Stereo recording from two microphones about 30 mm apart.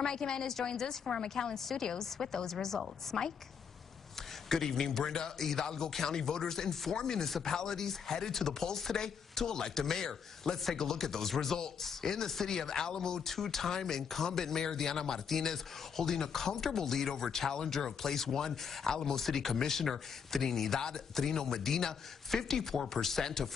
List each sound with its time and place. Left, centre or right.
0.0 s a woman's voice: left
4.5 s a woman's voice: centre
13.2 s speech: centre